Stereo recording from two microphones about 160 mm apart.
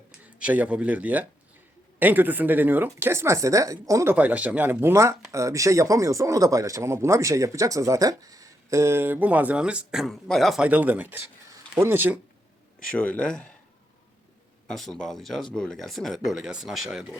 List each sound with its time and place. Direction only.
0.3 s speech: 10° right (ahead or behind)
4.1 s speech: 10° right (ahead or behind)
12.9 s speech: 10° left (ahead or behind)
14.7 s speech: 5° left (ahead or behind)